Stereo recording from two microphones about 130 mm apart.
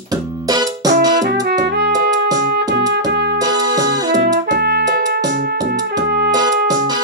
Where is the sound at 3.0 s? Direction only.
30° right (ahead or behind).